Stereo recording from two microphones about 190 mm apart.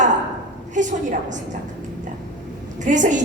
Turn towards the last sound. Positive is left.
turn(degrees=-40)  # may be behind; listen again after turning